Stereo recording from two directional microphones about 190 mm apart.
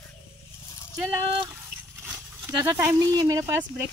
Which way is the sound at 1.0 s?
10° right (ahead or behind).